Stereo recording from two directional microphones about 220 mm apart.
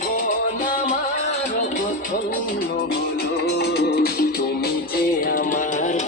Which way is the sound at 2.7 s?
45° left (ahead or behind).